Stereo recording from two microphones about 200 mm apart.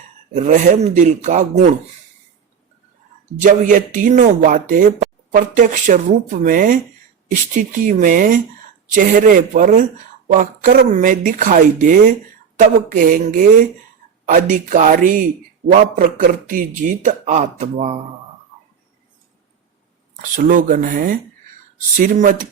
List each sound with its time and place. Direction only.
0.3 s speech: 40° right (ahead or behind)
3.4 s speech: 40° right (ahead or behind)
14.5 s speech: 40° right (ahead or behind)
20.3 s speech: 40° right (ahead or behind)